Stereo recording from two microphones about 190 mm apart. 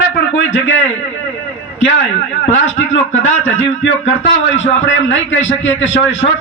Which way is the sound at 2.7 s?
90° left.